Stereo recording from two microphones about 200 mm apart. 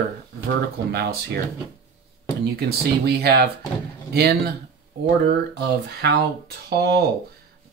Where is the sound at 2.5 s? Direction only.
55° right (ahead or behind).